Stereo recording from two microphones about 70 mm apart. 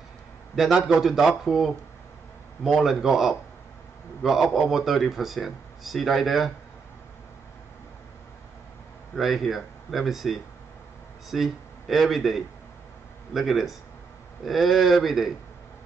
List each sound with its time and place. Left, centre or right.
0.6 s speech: centre
9.1 s speech: centre